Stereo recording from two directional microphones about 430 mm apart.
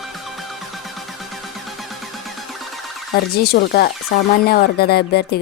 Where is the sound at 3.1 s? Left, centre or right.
Left.